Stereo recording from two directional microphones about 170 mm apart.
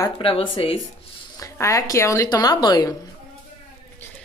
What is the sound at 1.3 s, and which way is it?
Speech, 20° left (ahead or behind).